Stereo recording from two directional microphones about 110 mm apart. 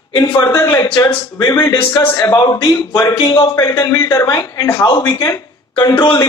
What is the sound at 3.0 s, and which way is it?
A man's voice, 30° left (ahead or behind).